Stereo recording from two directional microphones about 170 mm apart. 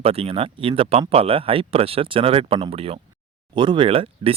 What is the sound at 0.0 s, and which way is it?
Speech, 35° right (ahead or behind).